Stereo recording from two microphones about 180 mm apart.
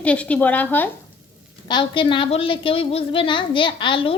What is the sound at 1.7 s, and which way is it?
A woman's voice, 25° left (ahead or behind).